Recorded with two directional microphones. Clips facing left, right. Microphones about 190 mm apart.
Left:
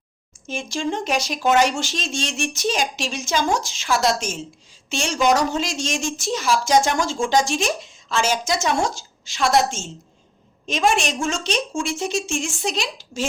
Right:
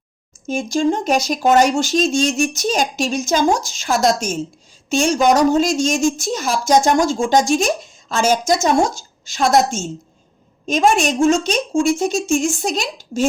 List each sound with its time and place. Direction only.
0.4 s a woman's voice: 40° right (ahead or behind)